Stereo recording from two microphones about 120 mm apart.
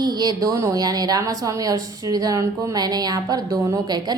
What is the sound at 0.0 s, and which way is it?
A woman's voice, 35° right (ahead or behind).